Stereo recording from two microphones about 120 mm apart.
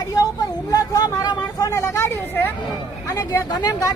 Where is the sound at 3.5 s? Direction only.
30° left (ahead or behind).